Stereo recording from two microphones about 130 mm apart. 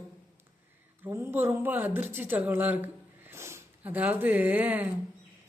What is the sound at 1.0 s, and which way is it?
Mantra, 15° right (ahead or behind).